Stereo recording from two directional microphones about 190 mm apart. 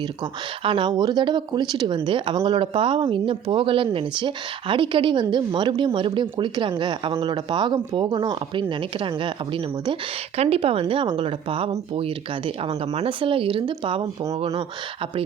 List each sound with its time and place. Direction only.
0.6 s a woman's voice: 25° right (ahead or behind)
12.9 s a woman's voice: 30° right (ahead or behind)